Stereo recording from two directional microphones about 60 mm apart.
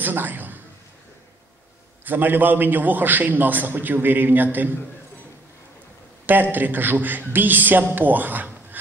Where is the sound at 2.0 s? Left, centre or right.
Right.